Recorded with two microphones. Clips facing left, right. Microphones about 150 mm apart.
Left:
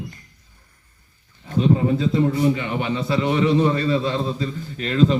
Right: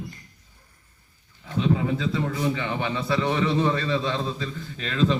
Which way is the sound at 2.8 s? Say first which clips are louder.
Left 3 dB; 20° left (ahead or behind).